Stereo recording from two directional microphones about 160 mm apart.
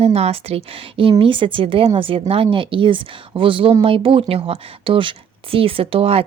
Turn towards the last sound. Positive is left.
turn(degrees=-35)  # may be behind; listen again after turning